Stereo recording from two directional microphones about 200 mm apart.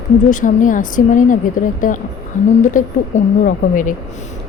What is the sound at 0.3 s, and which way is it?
Speech, 40° left (ahead or behind).